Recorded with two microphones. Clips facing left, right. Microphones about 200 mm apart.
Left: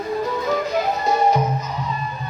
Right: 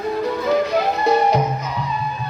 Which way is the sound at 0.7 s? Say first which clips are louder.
Right 3 dB; 65° right (ahead or behind).